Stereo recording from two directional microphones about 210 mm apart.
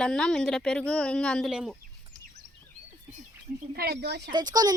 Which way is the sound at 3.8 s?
50° right (ahead or behind).